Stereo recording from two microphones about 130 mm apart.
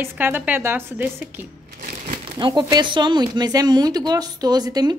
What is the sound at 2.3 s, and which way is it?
Speech, 30° right (ahead or behind).